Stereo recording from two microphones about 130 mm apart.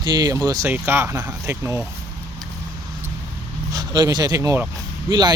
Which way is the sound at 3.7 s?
30° right (ahead or behind).